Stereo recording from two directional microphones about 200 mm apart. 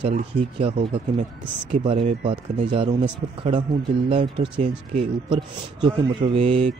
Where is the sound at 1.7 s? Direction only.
30° right (ahead or behind).